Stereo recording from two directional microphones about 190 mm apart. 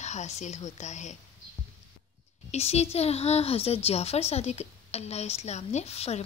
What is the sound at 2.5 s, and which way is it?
A woman's voice, 35° left (ahead or behind).